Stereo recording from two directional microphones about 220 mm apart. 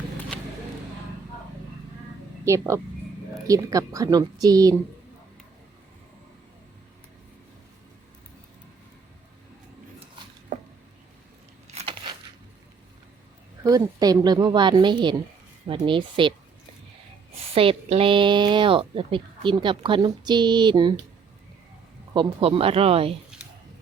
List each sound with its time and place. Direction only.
2.4 s a woman's voice: 15° right (ahead or behind)
11.7 s crunch: 25° right (ahead or behind)
13.7 s speech: 15° right (ahead or behind)
17.5 s speech: 25° right (ahead or behind)
22.1 s speech: 25° right (ahead or behind)
23.3 s a sound: 5° right (ahead or behind)